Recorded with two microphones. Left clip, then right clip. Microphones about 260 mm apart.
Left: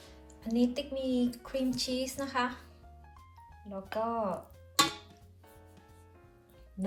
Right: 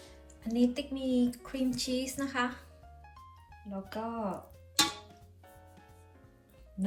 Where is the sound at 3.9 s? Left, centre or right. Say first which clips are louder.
Left 5 dB; left.